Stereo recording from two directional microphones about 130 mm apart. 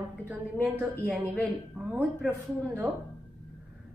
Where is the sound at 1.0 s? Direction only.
5° left (ahead or behind).